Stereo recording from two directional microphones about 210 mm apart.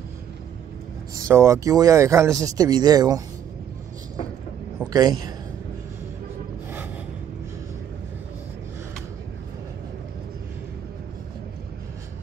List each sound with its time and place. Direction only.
1.2 s speech: 15° right (ahead or behind)
4.7 s a man's voice: 20° right (ahead or behind)